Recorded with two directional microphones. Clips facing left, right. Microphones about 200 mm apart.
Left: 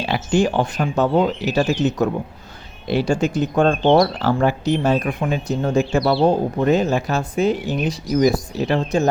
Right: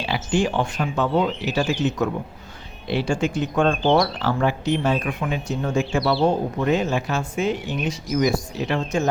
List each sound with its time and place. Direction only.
0.0 s speech: 45° left (ahead or behind)